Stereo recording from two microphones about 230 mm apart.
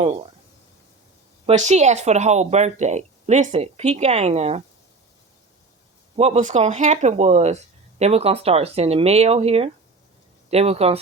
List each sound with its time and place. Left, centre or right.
0.0 s speech: right
1.5 s speech: right
6.1 s speech: right